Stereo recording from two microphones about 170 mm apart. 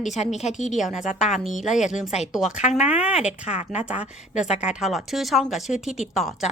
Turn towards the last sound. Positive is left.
turn(degrees=0)  # may be behind; listen again after turning